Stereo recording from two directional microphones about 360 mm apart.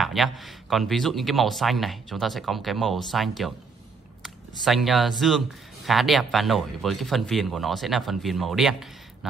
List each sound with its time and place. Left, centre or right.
0.0 s speech: centre